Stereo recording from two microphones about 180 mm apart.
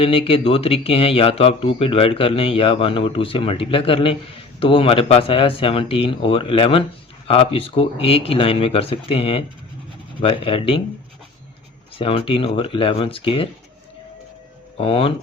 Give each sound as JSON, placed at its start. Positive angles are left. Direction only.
{"t": 0.0, "sound": "speech", "side_deg": 30}
{"t": 11.9, "sound": "speech", "side_deg": 30}
{"t": 14.8, "sound": "speech", "side_deg": 30}